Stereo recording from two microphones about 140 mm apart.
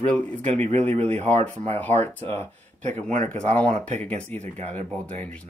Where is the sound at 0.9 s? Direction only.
50° right (ahead or behind).